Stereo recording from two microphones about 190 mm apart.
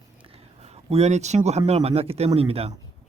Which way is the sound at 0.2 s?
30° right (ahead or behind).